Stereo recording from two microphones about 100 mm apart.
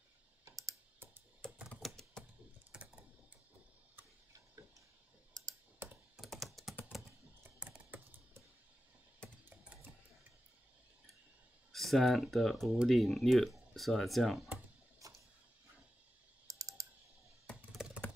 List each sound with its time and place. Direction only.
0.5 s typing: 35° right (ahead or behind)
1.4 s typewriter: 5° left (ahead or behind)
1.8 s typing: 5° left (ahead or behind)
2.7 s typing: 10° right (ahead or behind)
5.3 s computer keyboard: 35° right (ahead or behind)
5.8 s computer keyboard: 25° right (ahead or behind)
6.1 s computer keyboard: centre (ahead or behind)
7.6 s typing: 10° right (ahead or behind)
9.2 s typing: 10° left (ahead or behind)
11.7 s speech: centre (ahead or behind)
15.0 s printer: 35° right (ahead or behind)
16.4 s typing: 35° right (ahead or behind)
17.7 s a sound: 5° right (ahead or behind)